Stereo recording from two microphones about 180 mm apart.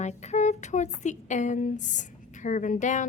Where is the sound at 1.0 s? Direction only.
40° left (ahead or behind).